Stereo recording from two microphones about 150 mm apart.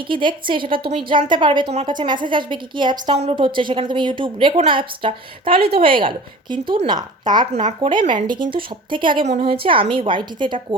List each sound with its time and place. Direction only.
0.0 s a woman's voice: 35° right (ahead or behind)
7.5 s speech: 45° right (ahead or behind)
7.8 s a woman's voice: 30° right (ahead or behind)
9.2 s a woman's voice: 45° right (ahead or behind)